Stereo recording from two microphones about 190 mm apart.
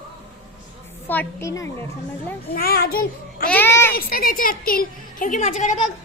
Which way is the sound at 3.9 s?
50° left (ahead or behind).